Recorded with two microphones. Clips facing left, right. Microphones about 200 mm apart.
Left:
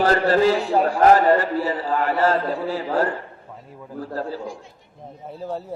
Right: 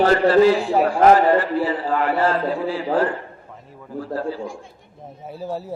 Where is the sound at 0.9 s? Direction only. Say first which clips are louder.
Right 1 dB; 40° left (ahead or behind).